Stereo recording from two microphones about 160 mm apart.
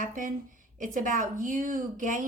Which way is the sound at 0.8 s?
55° right (ahead or behind).